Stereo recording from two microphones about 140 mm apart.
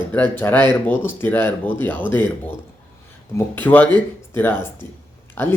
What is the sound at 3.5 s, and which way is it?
Speech, 15° left (ahead or behind).